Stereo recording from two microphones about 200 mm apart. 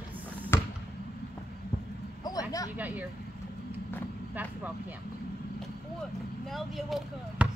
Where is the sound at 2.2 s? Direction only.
20° left (ahead or behind).